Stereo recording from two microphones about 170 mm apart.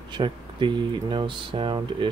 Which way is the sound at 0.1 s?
30° right (ahead or behind).